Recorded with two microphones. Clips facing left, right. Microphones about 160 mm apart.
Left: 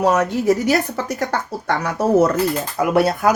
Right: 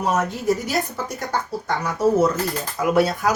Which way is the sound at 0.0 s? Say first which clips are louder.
Left 5 dB; 75° left (ahead or behind).